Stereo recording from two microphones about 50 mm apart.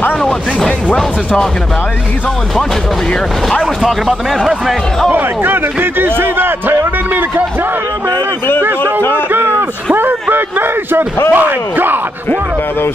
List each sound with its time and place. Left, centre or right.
0.2 s speech: centre
3.8 s speech: centre
5.1 s a man's voice: right
8.1 s speech: left
9.3 s a sound: right
10.3 s a man's voice: right